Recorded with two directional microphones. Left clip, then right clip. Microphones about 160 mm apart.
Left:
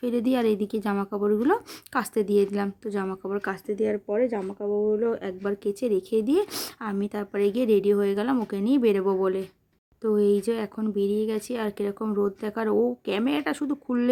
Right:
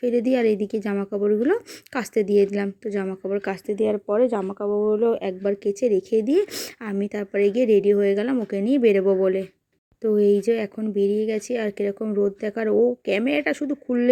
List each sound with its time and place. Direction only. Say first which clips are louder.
0.0 s speech: right 4 dB; 5° right (ahead or behind); by 4.9 s 25° right (ahead or behind)
5.2 s speech: right 5 dB; 10° right (ahead or behind)